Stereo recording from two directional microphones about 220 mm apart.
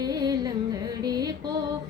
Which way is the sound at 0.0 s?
15° right (ahead or behind).